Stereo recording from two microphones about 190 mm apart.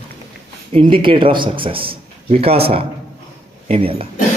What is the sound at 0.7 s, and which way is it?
A man's voice, 25° right (ahead or behind).